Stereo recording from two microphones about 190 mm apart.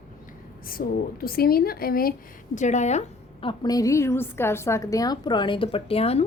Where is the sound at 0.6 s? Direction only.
50° left (ahead or behind).